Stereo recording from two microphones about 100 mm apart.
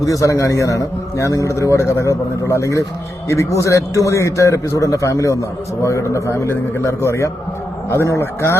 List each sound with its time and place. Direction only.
0.0 s a man's voice: 35° left (ahead or behind)